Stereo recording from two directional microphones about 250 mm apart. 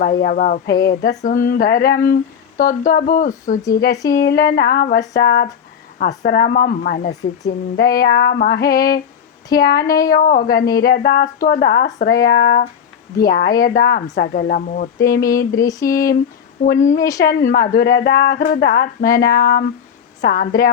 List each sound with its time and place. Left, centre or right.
0.0 s speech: left
15.5 s a sound: centre
16.6 s a woman's voice: left